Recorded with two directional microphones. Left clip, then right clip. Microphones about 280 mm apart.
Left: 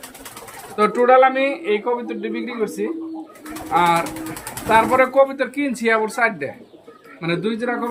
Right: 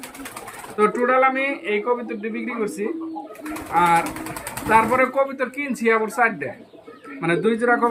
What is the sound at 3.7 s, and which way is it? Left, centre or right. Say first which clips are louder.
Speech: left 1 dB; centre.